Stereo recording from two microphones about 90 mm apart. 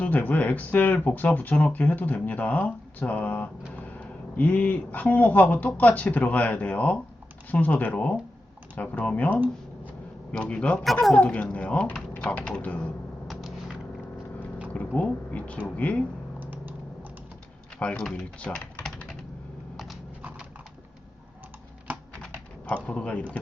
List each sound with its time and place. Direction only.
0.0 s speech: 15° left (ahead or behind)
13.2 s a sound: 5° right (ahead or behind)
14.7 s speech: 15° left (ahead or behind)
16.4 s typing: 20° right (ahead or behind)
17.7 s speech: 10° left (ahead or behind)
19.7 s a sound: centre (ahead or behind)
22.2 s pigeon: 10° left (ahead or behind)